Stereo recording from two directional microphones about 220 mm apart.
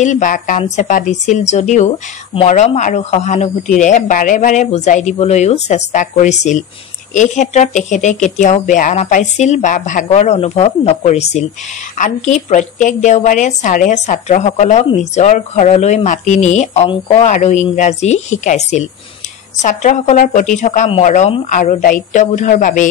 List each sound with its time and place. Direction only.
0.0 s a woman's voice: 35° left (ahead or behind)